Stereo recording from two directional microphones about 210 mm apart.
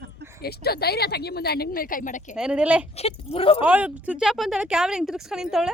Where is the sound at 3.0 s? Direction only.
30° left (ahead or behind).